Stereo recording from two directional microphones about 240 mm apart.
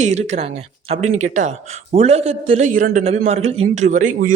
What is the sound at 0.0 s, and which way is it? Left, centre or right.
Speech, right.